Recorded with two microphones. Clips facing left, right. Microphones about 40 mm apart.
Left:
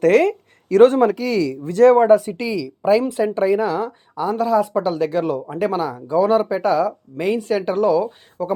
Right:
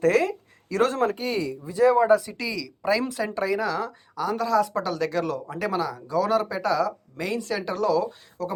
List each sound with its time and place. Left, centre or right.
0.0 s speech: left
1.0 s speech: left; by 5.5 s centre
5.5 s speech: left